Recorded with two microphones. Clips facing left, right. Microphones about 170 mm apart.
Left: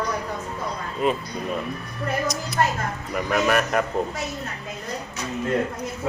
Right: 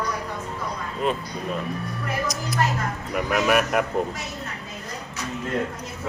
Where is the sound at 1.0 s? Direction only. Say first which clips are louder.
Left 2 dB; centre (ahead or behind).